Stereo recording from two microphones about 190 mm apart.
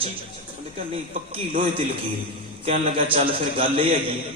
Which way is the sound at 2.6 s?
30° right (ahead or behind).